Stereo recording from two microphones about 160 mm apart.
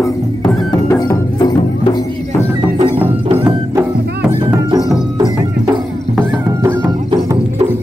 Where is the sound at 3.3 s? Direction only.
15° right (ahead or behind).